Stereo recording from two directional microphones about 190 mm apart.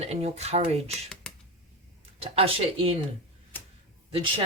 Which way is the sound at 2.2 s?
30° right (ahead or behind).